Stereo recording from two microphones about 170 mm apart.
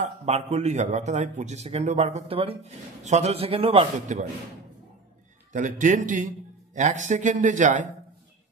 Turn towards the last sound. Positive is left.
turn(degrees=-45)  # may be behind; listen again after turning